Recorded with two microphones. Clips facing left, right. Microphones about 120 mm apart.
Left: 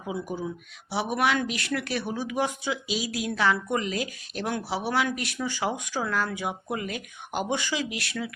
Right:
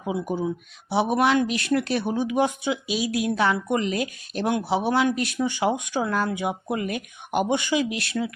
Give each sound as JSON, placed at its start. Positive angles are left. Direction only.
{"t": 0.0, "sound": "a woman's voice", "side_deg": -25}